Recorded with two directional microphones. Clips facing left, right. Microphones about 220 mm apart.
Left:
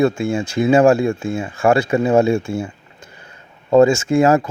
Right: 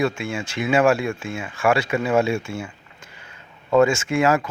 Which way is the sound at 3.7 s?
35° left (ahead or behind).